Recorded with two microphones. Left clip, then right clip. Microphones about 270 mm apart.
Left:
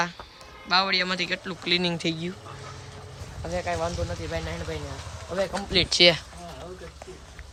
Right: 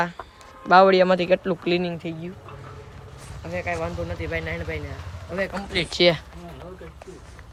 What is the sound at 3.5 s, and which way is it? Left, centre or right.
Speech, centre.